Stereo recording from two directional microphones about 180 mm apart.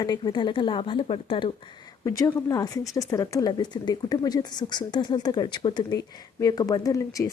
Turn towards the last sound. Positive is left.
turn(degrees=20)  # may be behind; listen again after turning